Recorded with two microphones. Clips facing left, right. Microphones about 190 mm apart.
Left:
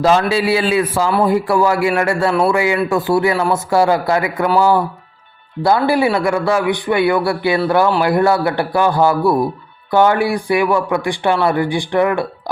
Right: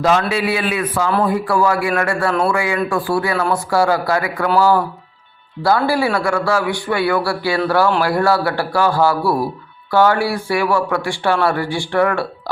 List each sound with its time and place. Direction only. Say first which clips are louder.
0.0 s a man's voice: left 3 dB; 30° left (ahead or behind); by 12.2 s 15° left (ahead or behind)